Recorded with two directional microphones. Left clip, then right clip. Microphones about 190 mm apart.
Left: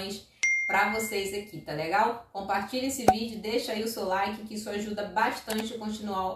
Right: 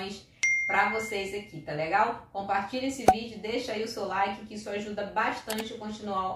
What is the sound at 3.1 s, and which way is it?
Speech, centre (ahead or behind).